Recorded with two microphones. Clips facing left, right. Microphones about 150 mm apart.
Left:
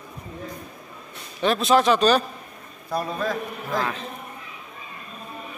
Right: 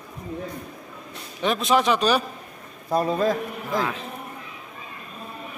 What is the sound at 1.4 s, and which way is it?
Speech, 15° right (ahead or behind).